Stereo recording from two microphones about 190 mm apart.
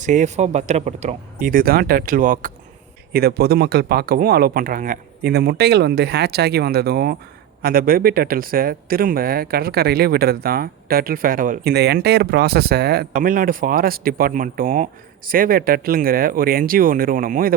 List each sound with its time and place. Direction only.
0.0 s speech: 40° right (ahead or behind)